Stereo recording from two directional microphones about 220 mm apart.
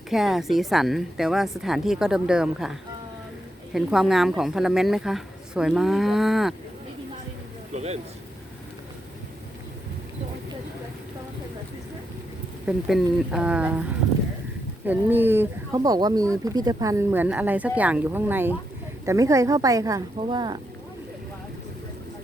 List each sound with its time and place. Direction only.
0.1 s speech: centre (ahead or behind)
7.7 s speech: 30° right (ahead or behind)
12.6 s speech: 5° right (ahead or behind)
14.8 s speech: 10° right (ahead or behind)